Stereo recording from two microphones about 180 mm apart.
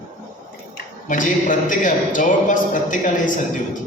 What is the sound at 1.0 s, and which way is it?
A man's voice, 45° left (ahead or behind).